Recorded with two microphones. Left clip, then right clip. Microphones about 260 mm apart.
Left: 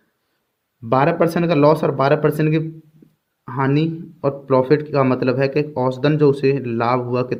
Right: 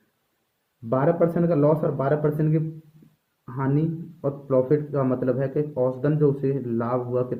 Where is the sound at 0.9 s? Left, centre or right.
Left.